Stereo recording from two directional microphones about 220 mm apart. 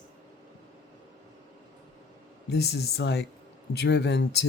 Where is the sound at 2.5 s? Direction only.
50° left (ahead or behind).